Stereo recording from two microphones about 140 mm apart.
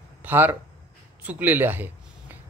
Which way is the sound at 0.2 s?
15° right (ahead or behind).